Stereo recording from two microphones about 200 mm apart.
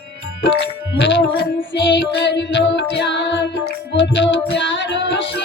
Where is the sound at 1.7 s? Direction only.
60° left (ahead or behind).